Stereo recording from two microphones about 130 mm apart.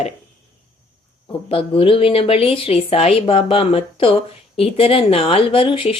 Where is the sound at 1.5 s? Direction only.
45° left (ahead or behind).